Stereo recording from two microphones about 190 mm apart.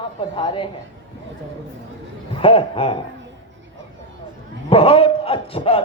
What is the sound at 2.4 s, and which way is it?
Speech, 30° left (ahead or behind).